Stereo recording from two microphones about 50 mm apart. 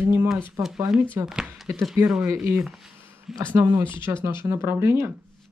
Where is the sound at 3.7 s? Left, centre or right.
Right.